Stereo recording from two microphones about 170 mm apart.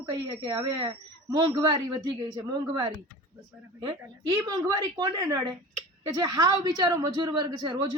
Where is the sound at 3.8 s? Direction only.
25° right (ahead or behind).